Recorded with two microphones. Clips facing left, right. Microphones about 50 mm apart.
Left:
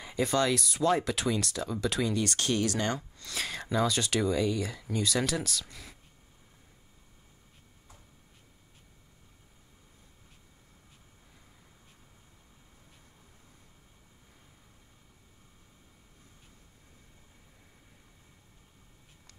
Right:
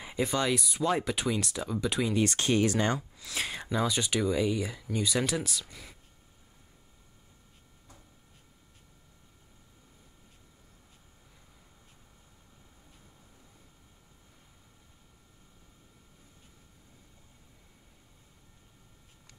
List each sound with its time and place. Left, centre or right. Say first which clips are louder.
0.0 s speech: left 2 dB; centre
3.0 s speech: right 1 dB; centre